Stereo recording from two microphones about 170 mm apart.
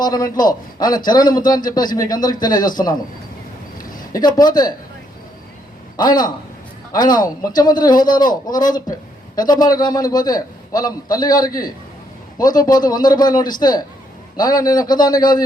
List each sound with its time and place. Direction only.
0.0 s a man's voice: 25° left (ahead or behind)
4.1 s a man's voice: 25° left (ahead or behind)
6.0 s a man's voice: 25° left (ahead or behind)